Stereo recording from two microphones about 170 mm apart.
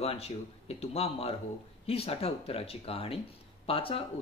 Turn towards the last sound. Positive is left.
turn(degrees=35)  # may be behind; listen again after turning